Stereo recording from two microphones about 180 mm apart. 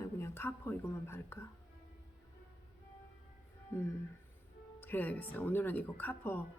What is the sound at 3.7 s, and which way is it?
Speech, 15° left (ahead or behind).